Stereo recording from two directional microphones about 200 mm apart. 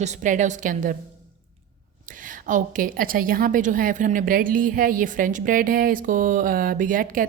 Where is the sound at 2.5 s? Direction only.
40° right (ahead or behind).